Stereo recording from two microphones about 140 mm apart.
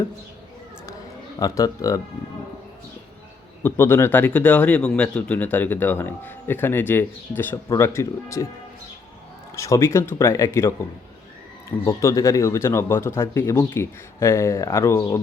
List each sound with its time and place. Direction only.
1.4 s speech: 25° left (ahead or behind)
3.6 s speech: 15° left (ahead or behind)
9.6 s speech: 20° left (ahead or behind)
11.9 s speech: 20° left (ahead or behind)